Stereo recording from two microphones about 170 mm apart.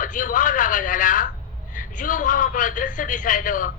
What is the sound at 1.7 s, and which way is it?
Speech, 50° left (ahead or behind).